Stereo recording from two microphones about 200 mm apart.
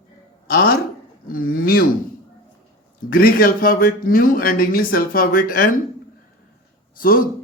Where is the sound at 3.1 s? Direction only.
45° left (ahead or behind).